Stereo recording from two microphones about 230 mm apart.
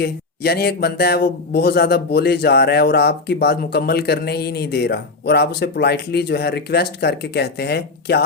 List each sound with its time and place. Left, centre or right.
0.0 s speech: left